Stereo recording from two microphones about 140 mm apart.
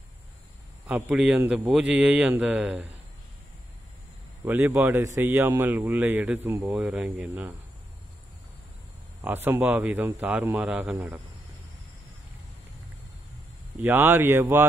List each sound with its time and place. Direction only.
0.8 s a man's voice: 10° right (ahead or behind)
4.5 s a man's voice: 15° right (ahead or behind)
9.2 s a man's voice: 15° right (ahead or behind)
13.8 s a man's voice: 15° right (ahead or behind)